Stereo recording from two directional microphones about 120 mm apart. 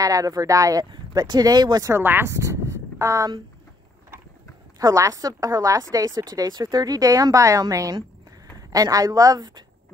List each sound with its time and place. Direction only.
0.0 s a woman's voice: 30° right (ahead or behind)
2.0 s speech: 20° right (ahead or behind)
4.7 s a woman's voice: 30° right (ahead or behind)